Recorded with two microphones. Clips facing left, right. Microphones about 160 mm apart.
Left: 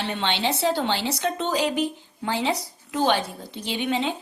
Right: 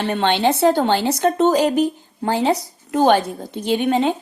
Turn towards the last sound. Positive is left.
turn(degrees=-45)  # may be behind; listen again after turning